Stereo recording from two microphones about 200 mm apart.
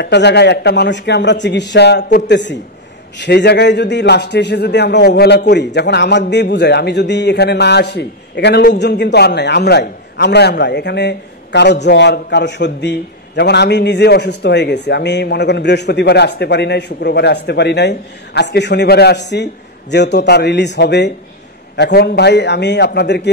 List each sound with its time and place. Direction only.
0.0 s a man's voice: 60° left (ahead or behind)